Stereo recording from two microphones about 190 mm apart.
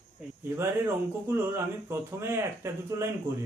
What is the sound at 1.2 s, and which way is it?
Speech, 10° right (ahead or behind).